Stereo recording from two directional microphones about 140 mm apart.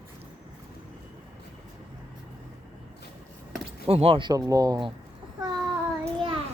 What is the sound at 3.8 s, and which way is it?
Speech, 45° right (ahead or behind).